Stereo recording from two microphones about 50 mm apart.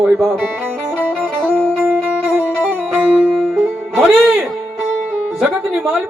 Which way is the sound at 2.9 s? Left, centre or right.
Right.